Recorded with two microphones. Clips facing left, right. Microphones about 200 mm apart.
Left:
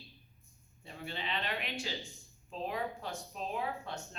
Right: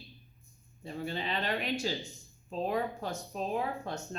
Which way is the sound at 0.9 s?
40° right (ahead or behind).